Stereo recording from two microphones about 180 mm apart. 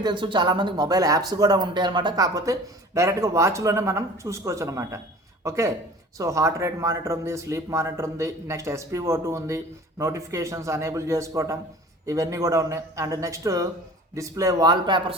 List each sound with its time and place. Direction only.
0.0 s speech: 25° right (ahead or behind)